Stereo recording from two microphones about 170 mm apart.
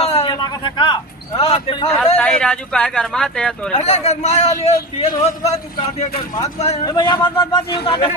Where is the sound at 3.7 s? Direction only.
40° left (ahead or behind).